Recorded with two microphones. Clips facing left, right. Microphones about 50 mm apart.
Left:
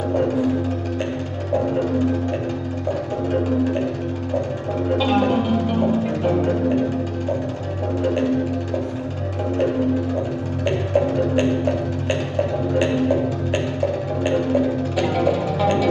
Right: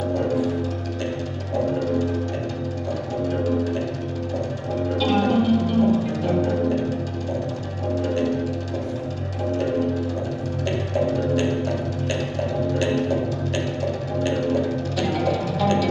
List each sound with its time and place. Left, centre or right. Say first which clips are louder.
4.9 s music: left 1 dB; left
11.1 s music: left 3 dB; left
14.2 s music: left 3 dB; left